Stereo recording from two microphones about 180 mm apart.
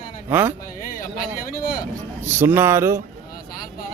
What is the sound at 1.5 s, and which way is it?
Speech, 50° left (ahead or behind).